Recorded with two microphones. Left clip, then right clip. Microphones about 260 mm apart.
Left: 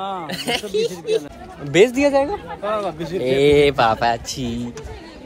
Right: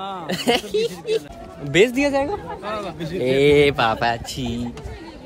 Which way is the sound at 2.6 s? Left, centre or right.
Centre.